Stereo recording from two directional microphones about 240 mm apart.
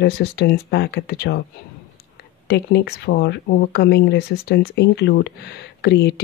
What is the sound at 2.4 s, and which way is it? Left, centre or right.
Speech, left.